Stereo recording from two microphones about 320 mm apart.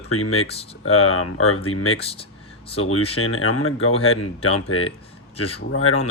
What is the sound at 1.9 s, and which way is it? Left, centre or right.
Speech, centre.